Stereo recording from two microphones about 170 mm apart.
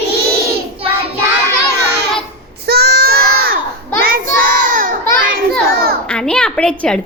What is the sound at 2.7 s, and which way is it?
Child singing, 70° right (ahead or behind).